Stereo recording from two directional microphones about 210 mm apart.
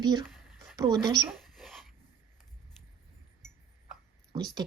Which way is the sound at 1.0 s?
20° right (ahead or behind).